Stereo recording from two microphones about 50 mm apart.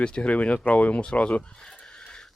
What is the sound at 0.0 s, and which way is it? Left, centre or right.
Speech, left.